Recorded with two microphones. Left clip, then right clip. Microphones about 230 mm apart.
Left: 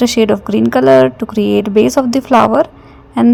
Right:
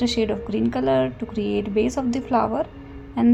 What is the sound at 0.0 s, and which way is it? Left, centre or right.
A woman's voice, left.